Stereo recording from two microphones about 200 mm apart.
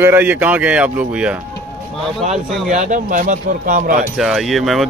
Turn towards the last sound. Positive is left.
turn(degrees=0)  # may be behind; listen again after turning